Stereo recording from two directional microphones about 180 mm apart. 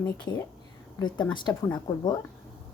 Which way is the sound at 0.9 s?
25° left (ahead or behind).